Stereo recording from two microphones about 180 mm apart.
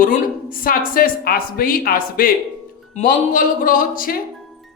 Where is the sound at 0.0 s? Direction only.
50° left (ahead or behind).